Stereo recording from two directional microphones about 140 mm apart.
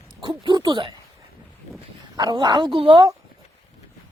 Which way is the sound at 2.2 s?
30° right (ahead or behind).